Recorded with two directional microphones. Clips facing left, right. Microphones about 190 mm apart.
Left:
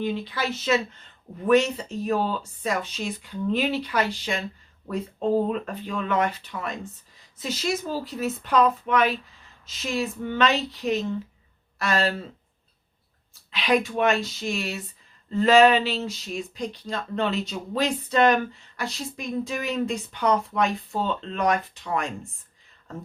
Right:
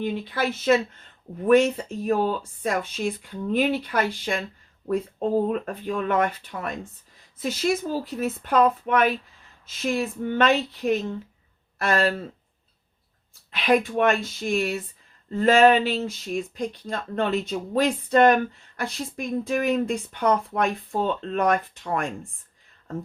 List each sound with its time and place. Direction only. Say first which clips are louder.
0.0 s speech: right 1 dB; 50° right (ahead or behind)
5.5 s speech: right 2 dB; 50° right (ahead or behind)
13.5 s speech: right 2 dB; 50° right (ahead or behind)